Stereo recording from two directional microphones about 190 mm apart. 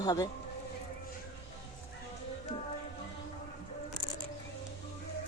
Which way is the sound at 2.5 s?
30° left (ahead or behind).